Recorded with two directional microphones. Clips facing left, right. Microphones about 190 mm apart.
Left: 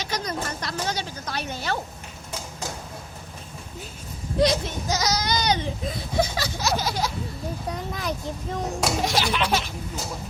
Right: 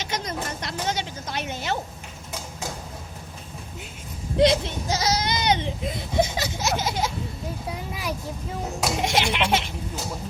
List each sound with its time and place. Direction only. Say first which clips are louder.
0.0 s a sound: left 1 dB; 25° right (ahead or behind)
4.4 s speech: right 2 dB; 25° right (ahead or behind)
7.7 s a child's voice: left 2 dB; 10° right (ahead or behind)
9.0 s baby laughter: right 3 dB; 25° right (ahead or behind)